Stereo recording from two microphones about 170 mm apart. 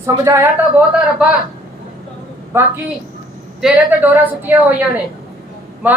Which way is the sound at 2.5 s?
15° right (ahead or behind).